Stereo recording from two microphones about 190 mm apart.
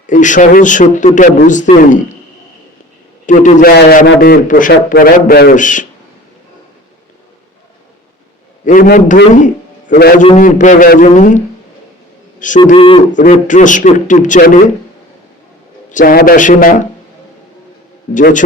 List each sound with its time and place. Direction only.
0.1 s a man's voice: 40° left (ahead or behind)
3.2 s a man's voice: 40° left (ahead or behind)
3.8 s a man's voice: 55° left (ahead or behind)
8.6 s a man's voice: 45° left (ahead or behind)
12.6 s speech: 30° left (ahead or behind)
13.1 s a man's voice: 40° left (ahead or behind)
15.9 s a man's voice: 45° left (ahead or behind)